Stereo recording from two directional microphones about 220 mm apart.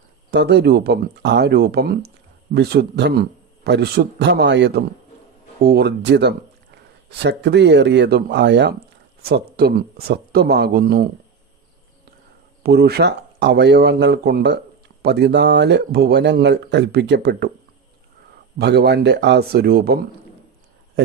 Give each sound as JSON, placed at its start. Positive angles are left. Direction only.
{"t": 0.3, "sound": "speech", "side_deg": -50}
{"t": 12.6, "sound": "speech", "side_deg": -45}
{"t": 18.6, "sound": "speech", "side_deg": -50}